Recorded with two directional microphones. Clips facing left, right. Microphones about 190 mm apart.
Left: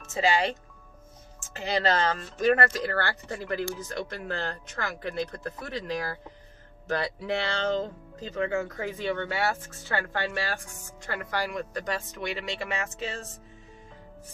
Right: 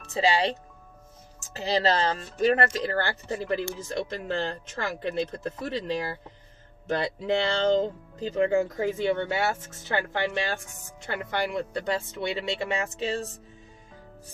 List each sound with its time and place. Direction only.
0.1 s speech: 35° right (ahead or behind)